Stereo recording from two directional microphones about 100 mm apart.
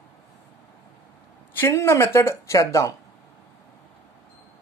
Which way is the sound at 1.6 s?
25° left (ahead or behind).